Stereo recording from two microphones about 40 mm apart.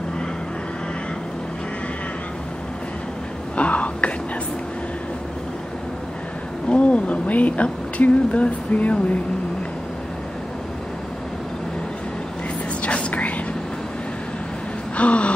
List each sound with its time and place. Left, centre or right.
3.5 s whispering: left
6.7 s speech: left
12.8 s whispering: left
15.0 s a sound: left